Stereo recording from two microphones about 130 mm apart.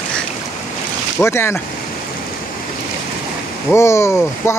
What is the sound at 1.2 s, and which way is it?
Speech, 20° left (ahead or behind).